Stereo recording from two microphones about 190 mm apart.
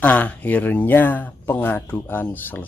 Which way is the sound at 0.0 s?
10° left (ahead or behind).